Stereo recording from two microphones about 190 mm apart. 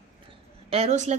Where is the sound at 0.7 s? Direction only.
35° right (ahead or behind).